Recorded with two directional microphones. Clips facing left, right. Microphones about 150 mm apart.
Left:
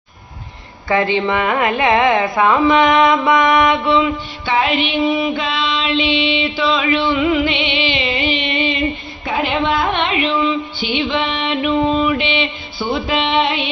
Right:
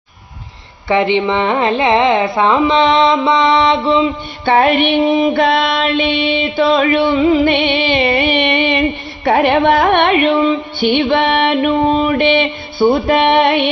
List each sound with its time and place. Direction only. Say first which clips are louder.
0.9 s mantra: right 3 dB; 20° right (ahead or behind)
4.4 s female singing: right 6 dB; 55° right (ahead or behind)
5.3 s female singing: right 7 dB; 65° right (ahead or behind)
7.2 s music: right 4 dB; 35° right (ahead or behind)
7.4 s music: right 6 dB; 55° right (ahead or behind)